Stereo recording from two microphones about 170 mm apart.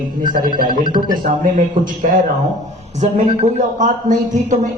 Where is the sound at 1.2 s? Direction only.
50° right (ahead or behind).